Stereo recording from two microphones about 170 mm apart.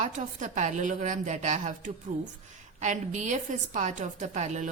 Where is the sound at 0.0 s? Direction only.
45° right (ahead or behind).